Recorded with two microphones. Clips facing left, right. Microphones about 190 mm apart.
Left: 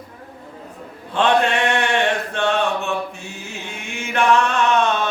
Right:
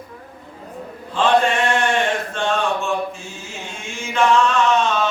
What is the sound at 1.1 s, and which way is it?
Mantra, 65° left (ahead or behind).